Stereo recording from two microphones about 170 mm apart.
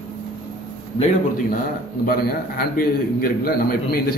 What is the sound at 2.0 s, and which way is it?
A man's voice, 60° left (ahead or behind).